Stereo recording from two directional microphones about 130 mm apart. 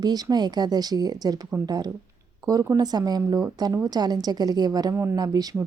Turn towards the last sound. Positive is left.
turn(degrees=-25)  # may be behind; listen again after turning